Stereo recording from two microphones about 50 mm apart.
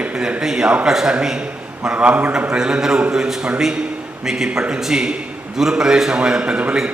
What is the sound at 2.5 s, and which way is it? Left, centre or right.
A man's voice, centre.